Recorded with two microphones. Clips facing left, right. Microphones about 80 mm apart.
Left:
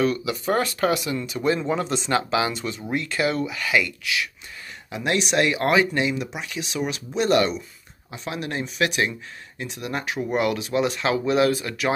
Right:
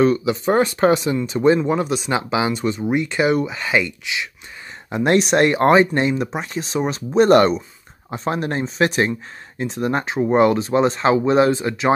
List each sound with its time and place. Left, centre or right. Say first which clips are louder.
0.0 s speech: right 6 dB; right
1.6 s speech: right 5 dB; centre
4.8 s speech: right 8 dB; right